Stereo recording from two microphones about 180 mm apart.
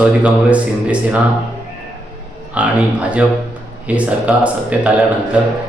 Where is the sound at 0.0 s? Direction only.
5° right (ahead or behind).